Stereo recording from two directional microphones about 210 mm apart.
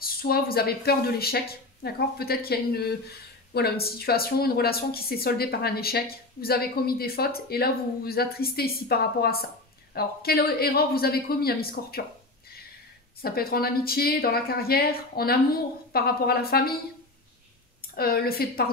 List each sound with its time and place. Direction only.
0.0 s speech: 45° left (ahead or behind)
13.2 s speech: 45° left (ahead or behind)
17.9 s speech: 45° left (ahead or behind)